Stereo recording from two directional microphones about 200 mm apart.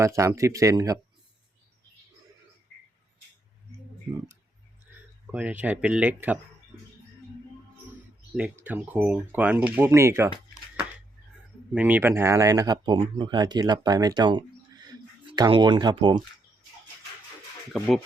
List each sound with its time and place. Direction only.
0.0 s speech: 15° right (ahead or behind)
4.9 s a man's voice: 5° right (ahead or behind)
8.4 s speech: 10° right (ahead or behind)
11.7 s speech: 10° right (ahead or behind)
17.7 s speech: centre (ahead or behind)